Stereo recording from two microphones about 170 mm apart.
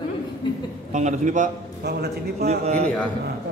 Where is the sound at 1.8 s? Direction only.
70° right (ahead or behind).